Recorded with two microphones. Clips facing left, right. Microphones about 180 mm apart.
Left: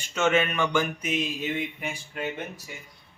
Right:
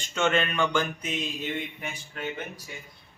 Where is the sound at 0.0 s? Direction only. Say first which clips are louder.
Left 2 dB; 5° left (ahead or behind).